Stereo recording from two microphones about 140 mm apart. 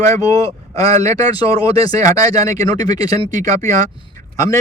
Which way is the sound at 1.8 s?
25° left (ahead or behind).